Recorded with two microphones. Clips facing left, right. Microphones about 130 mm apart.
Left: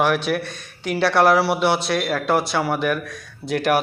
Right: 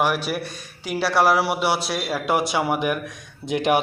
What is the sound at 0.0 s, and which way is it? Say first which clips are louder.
A man's voice: left 3 dB; 10° right (ahead or behind).